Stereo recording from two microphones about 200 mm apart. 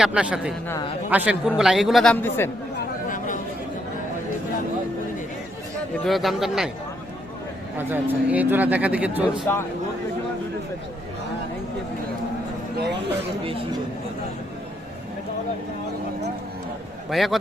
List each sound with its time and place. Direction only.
0.0 s a man's voice: 5° right (ahead or behind); by 2.5 s 10° left (ahead or behind)
3.1 s chatter: 40° left (ahead or behind)
6.1 s a man's voice: centre (ahead or behind)
7.8 s speech: 10° right (ahead or behind)
9.5 s speech: 10° left (ahead or behind)
12.7 s speech: 55° right (ahead or behind)
17.1 s a man's voice: centre (ahead or behind)